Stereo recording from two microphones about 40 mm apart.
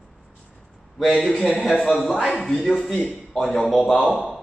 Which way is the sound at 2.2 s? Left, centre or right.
Centre.